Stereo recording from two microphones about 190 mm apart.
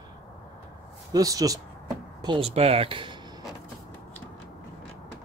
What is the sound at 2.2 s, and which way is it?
Speech, 30° right (ahead or behind).